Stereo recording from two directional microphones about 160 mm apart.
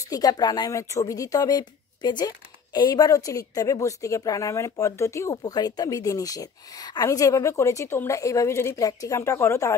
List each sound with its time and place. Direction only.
0.1 s speech: 25° left (ahead or behind)